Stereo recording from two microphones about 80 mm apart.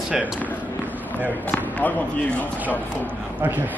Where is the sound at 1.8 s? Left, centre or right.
Centre.